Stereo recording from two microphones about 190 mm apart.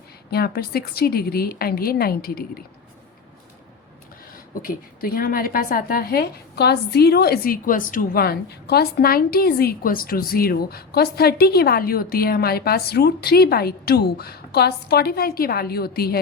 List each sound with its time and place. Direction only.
0.3 s a woman's voice: 55° left (ahead or behind)
4.6 s a woman's voice: 50° left (ahead or behind)